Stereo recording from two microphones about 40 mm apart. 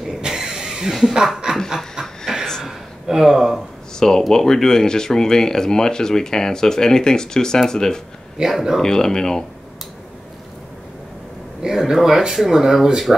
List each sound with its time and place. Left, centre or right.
0.2 s vehicle: centre
1.0 s speech: centre
2.6 s a sound: centre
3.9 s speech: centre
8.4 s speech: centre
8.8 s speech: centre
11.6 s speech: centre